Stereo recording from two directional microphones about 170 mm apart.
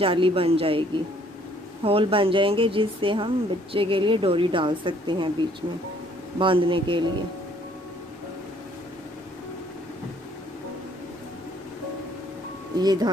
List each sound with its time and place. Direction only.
0.0 s speech: 30° right (ahead or behind)
1.9 s speech: 35° right (ahead or behind)
6.3 s speech: 30° right (ahead or behind)
12.8 s speech: 25° right (ahead or behind)